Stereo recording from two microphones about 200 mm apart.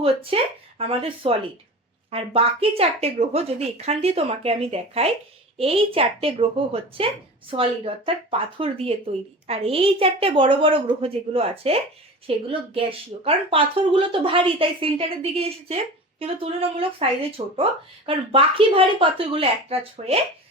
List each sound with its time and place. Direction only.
0.0 s speech: 25° right (ahead or behind)